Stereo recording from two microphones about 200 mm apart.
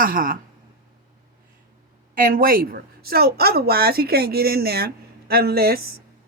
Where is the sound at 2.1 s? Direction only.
45° right (ahead or behind).